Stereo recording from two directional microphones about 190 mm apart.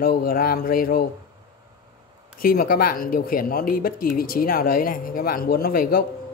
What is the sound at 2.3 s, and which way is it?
Speech, 50° left (ahead or behind).